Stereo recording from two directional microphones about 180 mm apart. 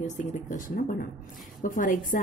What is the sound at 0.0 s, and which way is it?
Speech, 40° left (ahead or behind).